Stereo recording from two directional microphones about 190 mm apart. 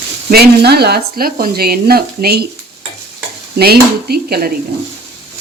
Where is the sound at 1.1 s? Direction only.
50° right (ahead or behind).